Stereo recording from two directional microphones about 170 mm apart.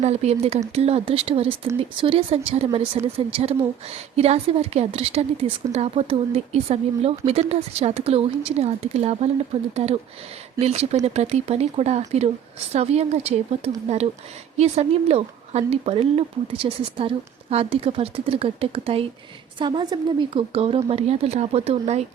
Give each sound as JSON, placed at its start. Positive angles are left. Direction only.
{"t": 0.0, "sound": "speech", "side_deg": -40}